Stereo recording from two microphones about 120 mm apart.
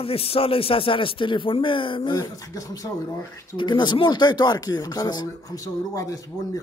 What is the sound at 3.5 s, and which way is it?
A man's voice, 40° left (ahead or behind).